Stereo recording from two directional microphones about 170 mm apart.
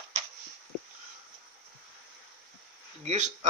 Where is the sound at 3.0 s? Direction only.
45° right (ahead or behind).